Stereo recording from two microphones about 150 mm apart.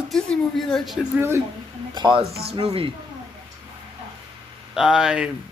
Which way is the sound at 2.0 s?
30° right (ahead or behind).